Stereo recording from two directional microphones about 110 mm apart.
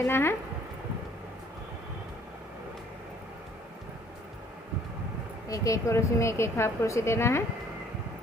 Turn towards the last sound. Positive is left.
turn(degrees=25)  # may be behind; listen again after turning